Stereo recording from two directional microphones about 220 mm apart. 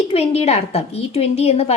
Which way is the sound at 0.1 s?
30° left (ahead or behind).